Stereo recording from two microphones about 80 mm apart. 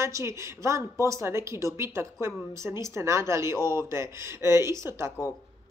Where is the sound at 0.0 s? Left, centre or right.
Right.